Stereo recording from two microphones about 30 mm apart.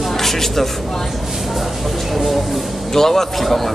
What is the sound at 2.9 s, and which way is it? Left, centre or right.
Speech, centre.